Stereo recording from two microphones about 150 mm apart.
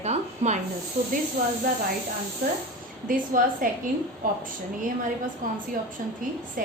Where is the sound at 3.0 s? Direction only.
65° right (ahead or behind).